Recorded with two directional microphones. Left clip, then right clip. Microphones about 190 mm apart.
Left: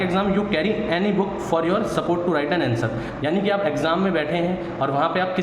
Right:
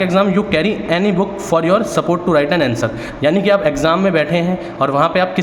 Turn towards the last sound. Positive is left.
turn(degrees=-40)  # may be behind; listen again after turning